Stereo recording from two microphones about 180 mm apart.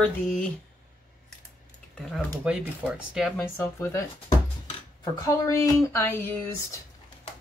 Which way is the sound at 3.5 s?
10° left (ahead or behind).